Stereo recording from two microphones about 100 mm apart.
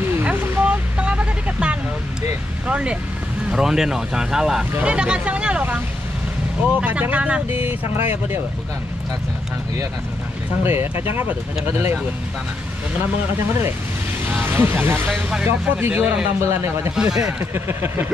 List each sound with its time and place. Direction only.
0.2 s vehicle: 15° right (ahead or behind)
2.7 s speech: 10° right (ahead or behind)
10.6 s speech: 20° right (ahead or behind)
14.3 s speech: 20° right (ahead or behind)
15.9 s speech: 10° right (ahead or behind)
16.3 s speech: 25° right (ahead or behind)
16.9 s speech: 5° right (ahead or behind)
17.6 s speech: 25° right (ahead or behind)